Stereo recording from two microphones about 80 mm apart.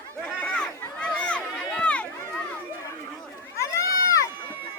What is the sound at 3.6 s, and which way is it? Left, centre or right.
Run, left.